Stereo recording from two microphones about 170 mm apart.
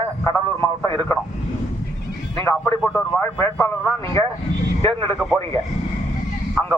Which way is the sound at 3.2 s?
15° left (ahead or behind).